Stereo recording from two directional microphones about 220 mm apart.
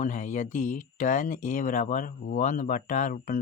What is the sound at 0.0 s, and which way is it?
Speech, 35° left (ahead or behind).